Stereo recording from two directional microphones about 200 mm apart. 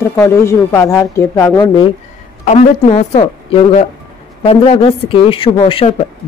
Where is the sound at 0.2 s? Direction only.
15° left (ahead or behind).